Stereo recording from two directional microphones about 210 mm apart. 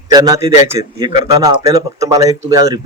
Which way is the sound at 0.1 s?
15° right (ahead or behind).